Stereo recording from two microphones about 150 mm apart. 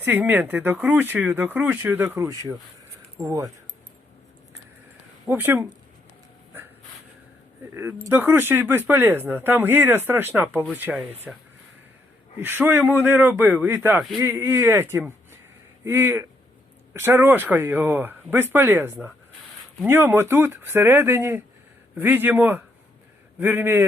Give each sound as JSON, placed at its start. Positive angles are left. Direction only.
{"t": 0.0, "sound": "speech", "side_deg": -15}
{"t": 5.3, "sound": "speech", "side_deg": -15}
{"t": 7.7, "sound": "speech", "side_deg": -15}
{"t": 12.4, "sound": "speech", "side_deg": -15}